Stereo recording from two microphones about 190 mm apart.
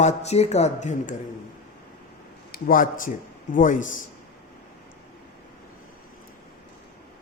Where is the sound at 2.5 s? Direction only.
45° left (ahead or behind).